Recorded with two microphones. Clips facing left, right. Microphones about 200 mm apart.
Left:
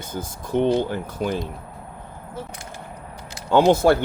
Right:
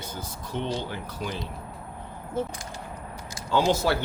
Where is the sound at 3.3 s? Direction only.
60° left (ahead or behind).